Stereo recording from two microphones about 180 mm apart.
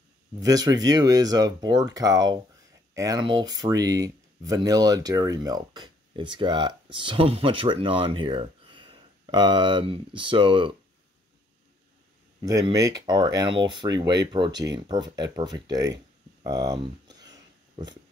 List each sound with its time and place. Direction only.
0.4 s speech: 20° right (ahead or behind)
12.4 s speech: 20° right (ahead or behind)
16.4 s a sound: 20° right (ahead or behind)